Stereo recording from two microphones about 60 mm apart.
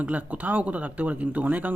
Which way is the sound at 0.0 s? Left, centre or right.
Right.